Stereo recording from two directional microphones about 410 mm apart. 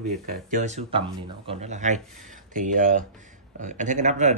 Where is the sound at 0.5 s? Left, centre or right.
Centre.